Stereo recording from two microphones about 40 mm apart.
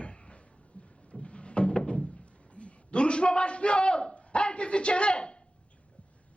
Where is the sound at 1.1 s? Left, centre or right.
Left.